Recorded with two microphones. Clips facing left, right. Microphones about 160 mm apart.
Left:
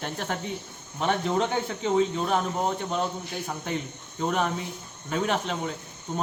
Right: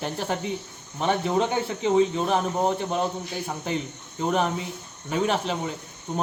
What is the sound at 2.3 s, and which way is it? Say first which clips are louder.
Speech: right 3 dB; 15° right (ahead or behind).